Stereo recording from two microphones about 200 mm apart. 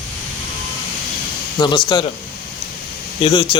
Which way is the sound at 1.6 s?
20° left (ahead or behind).